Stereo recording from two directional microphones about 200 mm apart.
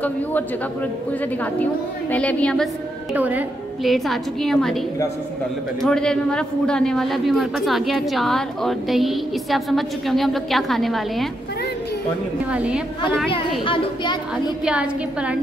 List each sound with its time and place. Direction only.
0.0 s a man's voice: 10° left (ahead or behind)
12.4 s a man's voice: 5° right (ahead or behind)
14.6 s a man's voice: 5° right (ahead or behind)